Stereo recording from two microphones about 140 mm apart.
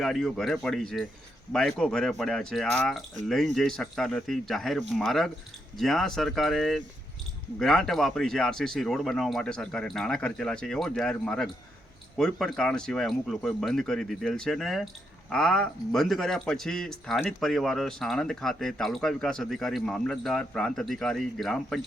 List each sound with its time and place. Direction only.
0.0 s speech: centre (ahead or behind)